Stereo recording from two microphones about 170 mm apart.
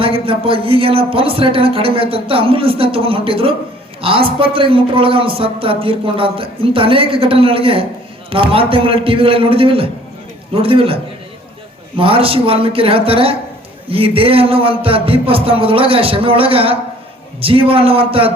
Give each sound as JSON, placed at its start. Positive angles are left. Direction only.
{"t": 0.0, "sound": "a man's voice", "side_deg": -30}